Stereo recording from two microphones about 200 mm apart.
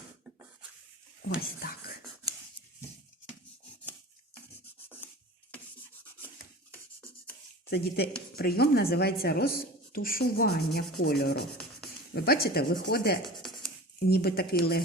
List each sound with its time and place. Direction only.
1.4 s speech: 50° left (ahead or behind)
7.7 s speech: 50° left (ahead or behind)